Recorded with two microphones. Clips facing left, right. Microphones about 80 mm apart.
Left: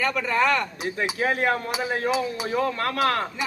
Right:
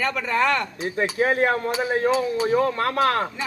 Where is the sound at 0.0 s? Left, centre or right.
Centre.